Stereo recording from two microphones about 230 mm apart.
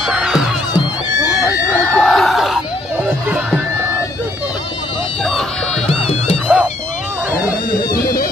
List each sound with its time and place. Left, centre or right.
0.0 s music: centre
1.7 s screaming: centre
5.9 s music: left
6.4 s music: centre
7.3 s a sound: left